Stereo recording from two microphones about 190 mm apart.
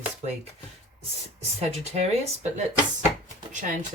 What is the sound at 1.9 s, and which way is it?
Speech, 35° right (ahead or behind).